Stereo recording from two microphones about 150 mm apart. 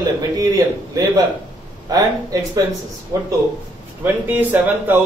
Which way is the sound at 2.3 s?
20° right (ahead or behind).